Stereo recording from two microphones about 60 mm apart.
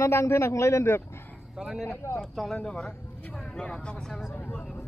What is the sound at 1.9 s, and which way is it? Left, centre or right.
Speech, left.